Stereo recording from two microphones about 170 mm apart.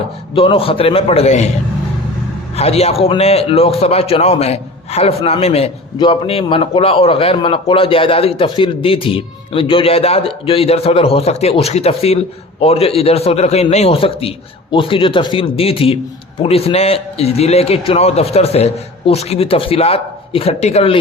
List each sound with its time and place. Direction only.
0.3 s a man's voice: 35° left (ahead or behind)
2.6 s a man's voice: 35° left (ahead or behind)